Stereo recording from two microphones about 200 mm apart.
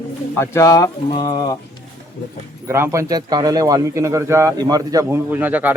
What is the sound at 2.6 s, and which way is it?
Speech, 15° right (ahead or behind).